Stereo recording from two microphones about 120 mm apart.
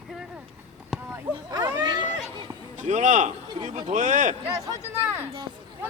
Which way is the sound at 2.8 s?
90° right.